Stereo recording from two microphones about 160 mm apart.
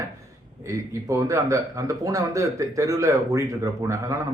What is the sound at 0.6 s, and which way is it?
A man's voice, 20° right (ahead or behind).